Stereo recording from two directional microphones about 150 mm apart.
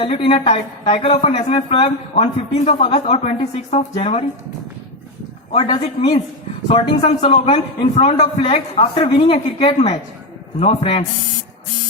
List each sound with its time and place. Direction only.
0.0 s a woman's voice: 35° left (ahead or behind)
5.5 s a woman's voice: 35° left (ahead or behind)
6.7 s a woman's voice: 45° left (ahead or behind)